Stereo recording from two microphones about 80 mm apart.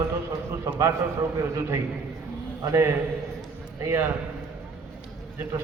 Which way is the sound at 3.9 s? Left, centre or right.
Right.